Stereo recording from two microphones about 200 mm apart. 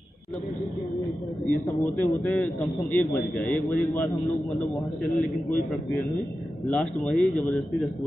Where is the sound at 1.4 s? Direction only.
10° left (ahead or behind).